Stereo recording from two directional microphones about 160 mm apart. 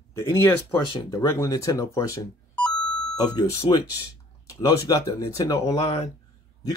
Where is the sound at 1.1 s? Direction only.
20° left (ahead or behind).